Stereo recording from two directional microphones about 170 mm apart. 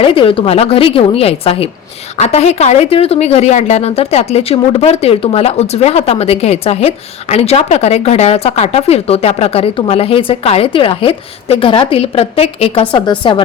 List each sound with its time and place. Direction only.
0.0 s speech: 30° left (ahead or behind)